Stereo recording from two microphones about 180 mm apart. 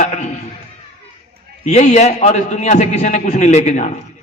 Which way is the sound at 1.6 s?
40° left (ahead or behind).